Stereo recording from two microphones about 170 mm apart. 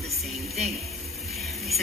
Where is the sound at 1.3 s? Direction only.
Centre (ahead or behind).